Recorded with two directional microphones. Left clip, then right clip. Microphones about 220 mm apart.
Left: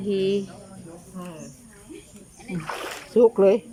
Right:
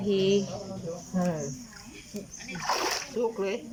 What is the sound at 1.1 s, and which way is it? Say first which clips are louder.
Speech: right 10 dB; 40° right (ahead or behind).